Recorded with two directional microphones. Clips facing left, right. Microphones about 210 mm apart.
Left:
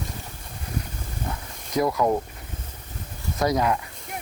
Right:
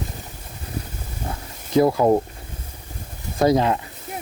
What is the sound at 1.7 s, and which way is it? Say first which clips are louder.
Speech: right 6 dB; 30° right (ahead or behind).